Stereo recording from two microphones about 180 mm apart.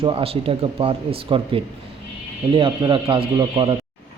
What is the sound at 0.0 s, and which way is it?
Speech, 30° right (ahead or behind).